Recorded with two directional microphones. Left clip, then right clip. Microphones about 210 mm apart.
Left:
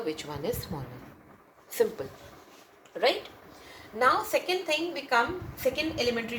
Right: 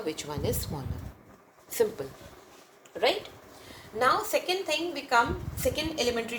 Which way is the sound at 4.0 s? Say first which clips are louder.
Left 1 dB; 15° right (ahead or behind).